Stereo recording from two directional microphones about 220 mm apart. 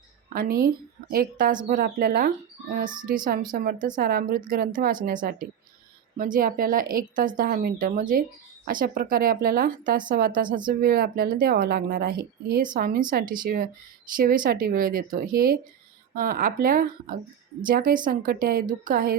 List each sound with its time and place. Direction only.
0.3 s a woman's voice: 40° right (ahead or behind)
3.5 s a woman's voice: 40° right (ahead or behind)